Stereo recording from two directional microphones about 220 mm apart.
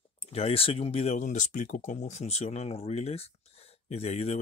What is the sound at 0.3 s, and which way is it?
Speech, 25° left (ahead or behind).